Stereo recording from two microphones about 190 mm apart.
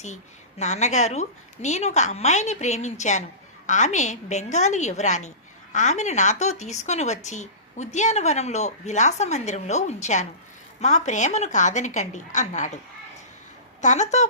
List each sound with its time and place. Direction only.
0.6 s speech: 35° left (ahead or behind)
13.8 s speech: 40° left (ahead or behind)